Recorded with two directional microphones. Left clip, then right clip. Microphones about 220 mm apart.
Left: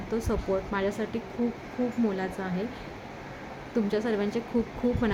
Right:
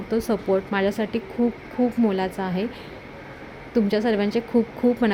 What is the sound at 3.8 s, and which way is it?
Speech, 20° right (ahead or behind).